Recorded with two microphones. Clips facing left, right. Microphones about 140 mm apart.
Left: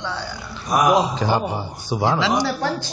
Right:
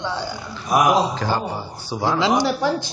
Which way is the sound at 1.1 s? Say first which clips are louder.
Left 2 dB; 15° left (ahead or behind).